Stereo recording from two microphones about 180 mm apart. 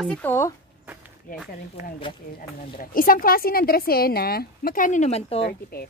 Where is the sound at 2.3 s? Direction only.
50° left (ahead or behind); by 5.5 s 35° left (ahead or behind).